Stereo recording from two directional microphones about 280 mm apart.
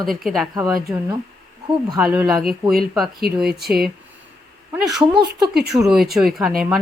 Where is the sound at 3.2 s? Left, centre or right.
Right.